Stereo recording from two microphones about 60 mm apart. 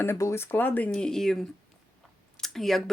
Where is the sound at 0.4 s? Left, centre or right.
Left.